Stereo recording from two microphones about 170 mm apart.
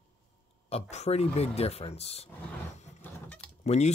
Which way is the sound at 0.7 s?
40° left (ahead or behind).